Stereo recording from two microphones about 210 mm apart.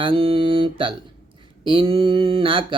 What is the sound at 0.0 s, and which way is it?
Speech, 25° right (ahead or behind).